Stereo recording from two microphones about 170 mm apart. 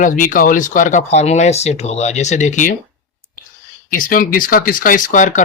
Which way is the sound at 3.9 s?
55° left (ahead or behind).